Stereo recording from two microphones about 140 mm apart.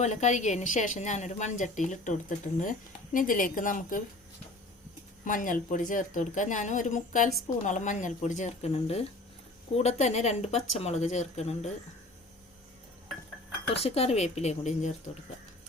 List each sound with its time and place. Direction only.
0.0 s a woman's voice: 55° left (ahead or behind)
2.6 s a woman's voice: 70° left (ahead or behind)
5.2 s a woman's voice: 75° left (ahead or behind); by 11.7 s 50° left (ahead or behind)
13.8 s speech: 45° left (ahead or behind)